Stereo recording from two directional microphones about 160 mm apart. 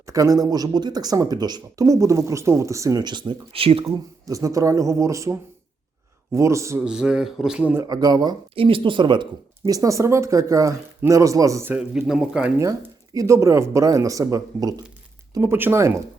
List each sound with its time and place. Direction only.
0.1 s speech: 20° right (ahead or behind)
3.8 s speech: 20° right (ahead or behind)
6.8 s speech: 5° right (ahead or behind)
7.7 s speech: 20° right (ahead or behind)
11.7 s speech: 5° right (ahead or behind)
12.5 s speech: 20° right (ahead or behind)